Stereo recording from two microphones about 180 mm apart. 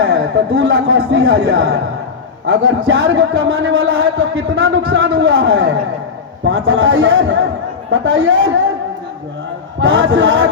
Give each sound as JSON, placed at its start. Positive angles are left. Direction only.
{"t": 0.0, "sound": "a man's voice", "side_deg": -75}
{"t": 2.5, "sound": "a man's voice", "side_deg": -90}
{"t": 9.8, "sound": "a man's voice", "side_deg": -90}